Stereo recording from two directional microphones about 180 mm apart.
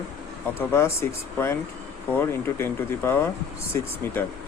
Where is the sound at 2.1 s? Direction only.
10° left (ahead or behind).